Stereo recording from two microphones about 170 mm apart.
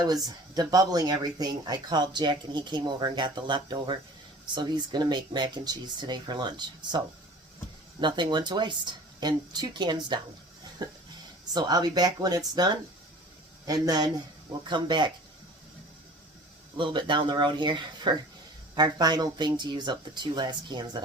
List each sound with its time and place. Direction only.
0.0 s speech: 25° right (ahead or behind)
8.0 s speech: 25° right (ahead or behind)
11.5 s speech: 25° right (ahead or behind)
13.8 s speech: 25° right (ahead or behind)
16.7 s speech: 30° right (ahead or behind)